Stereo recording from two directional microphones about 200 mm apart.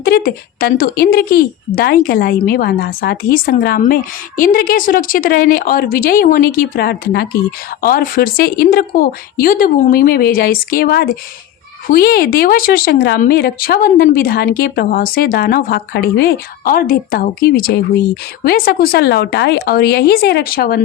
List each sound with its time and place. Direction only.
0.0 s a woman's voice: 50° left (ahead or behind)